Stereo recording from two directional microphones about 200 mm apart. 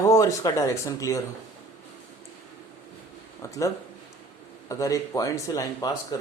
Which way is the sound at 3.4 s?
15° left (ahead or behind).